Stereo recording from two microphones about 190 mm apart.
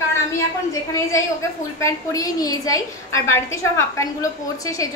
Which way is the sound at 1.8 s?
15° left (ahead or behind).